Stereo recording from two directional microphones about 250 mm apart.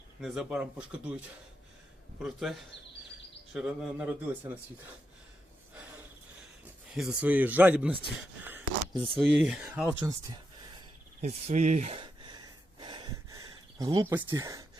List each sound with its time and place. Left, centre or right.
0.2 s speech: centre
2.2 s speech: centre
6.9 s speech: centre
8.4 s a sound: centre
9.1 s speech: centre
11.2 s speech: right
12.8 s a sound: centre